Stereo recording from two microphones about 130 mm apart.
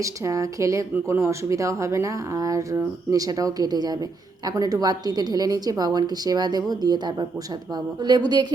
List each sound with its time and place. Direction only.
0.0 s speech: 25° right (ahead or behind)